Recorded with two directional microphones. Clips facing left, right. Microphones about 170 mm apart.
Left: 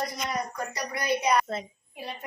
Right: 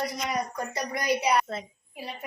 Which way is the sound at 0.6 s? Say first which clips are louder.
Right 1 dB; 20° right (ahead or behind).